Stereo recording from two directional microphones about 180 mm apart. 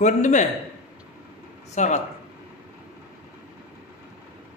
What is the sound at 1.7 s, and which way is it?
Speech, 40° left (ahead or behind).